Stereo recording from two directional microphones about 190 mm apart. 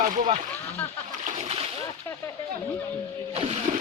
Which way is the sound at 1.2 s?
35° right (ahead or behind).